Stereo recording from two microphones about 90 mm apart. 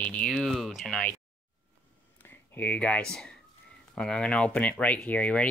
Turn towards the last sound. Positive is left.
turn(degrees=15)  # may be behind; listen again after turning